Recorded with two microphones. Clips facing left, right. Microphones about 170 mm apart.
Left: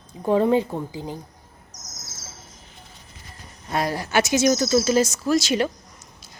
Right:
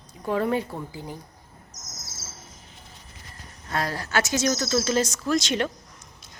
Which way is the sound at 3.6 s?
15° left (ahead or behind).